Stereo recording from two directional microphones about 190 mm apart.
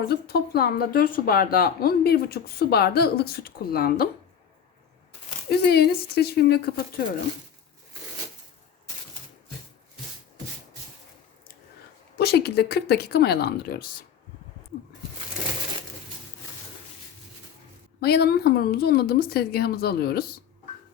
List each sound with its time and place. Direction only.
0.1 s speech: 55° left (ahead or behind)
5.5 s a woman's voice: 55° left (ahead or behind)
12.1 s a woman's voice: 55° left (ahead or behind)
18.0 s a woman's voice: 55° left (ahead or behind)